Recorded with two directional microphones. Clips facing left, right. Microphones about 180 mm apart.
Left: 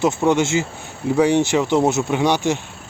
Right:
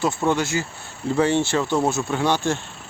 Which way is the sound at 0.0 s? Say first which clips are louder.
Left 4 dB; 20° left (ahead or behind).